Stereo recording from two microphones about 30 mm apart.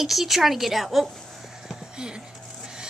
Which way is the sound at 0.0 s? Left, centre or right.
Centre.